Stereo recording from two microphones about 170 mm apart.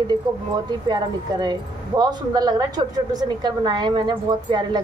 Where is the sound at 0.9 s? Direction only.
25° right (ahead or behind).